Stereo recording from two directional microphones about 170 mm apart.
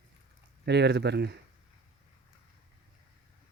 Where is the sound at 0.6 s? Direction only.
80° right.